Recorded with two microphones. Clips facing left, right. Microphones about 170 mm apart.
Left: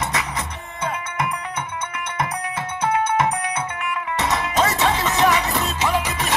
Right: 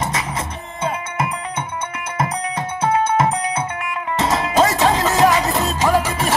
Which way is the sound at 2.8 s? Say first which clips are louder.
Right 3 dB; 30° right (ahead or behind).